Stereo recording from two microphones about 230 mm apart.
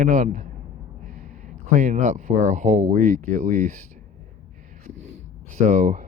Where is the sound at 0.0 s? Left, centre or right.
Right.